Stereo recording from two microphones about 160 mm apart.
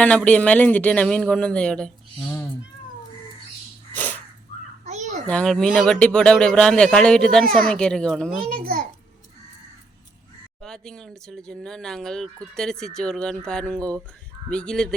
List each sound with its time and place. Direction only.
0.0 s speech: 10° left (ahead or behind)
3.9 s dog: 10° left (ahead or behind)
4.9 s children playing: 45° right (ahead or behind)
5.2 s speech: 5° left (ahead or behind)
8.4 s a child's voice: 60° right (ahead or behind)
10.6 s speech: 5° left (ahead or behind)